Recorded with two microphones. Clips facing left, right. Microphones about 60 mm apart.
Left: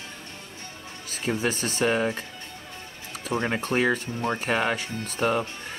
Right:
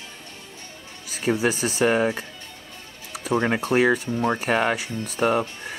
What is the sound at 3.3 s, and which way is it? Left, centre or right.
Speech, centre.